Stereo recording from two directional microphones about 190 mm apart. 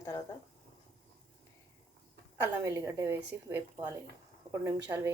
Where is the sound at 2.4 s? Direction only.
15° right (ahead or behind).